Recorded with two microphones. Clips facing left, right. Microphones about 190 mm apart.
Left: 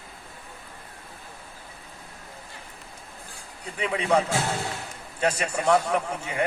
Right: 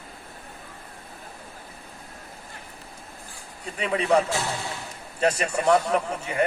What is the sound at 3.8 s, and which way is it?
Speech, 35° right (ahead or behind).